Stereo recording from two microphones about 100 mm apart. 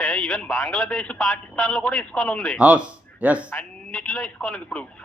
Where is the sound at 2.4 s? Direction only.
5° right (ahead or behind).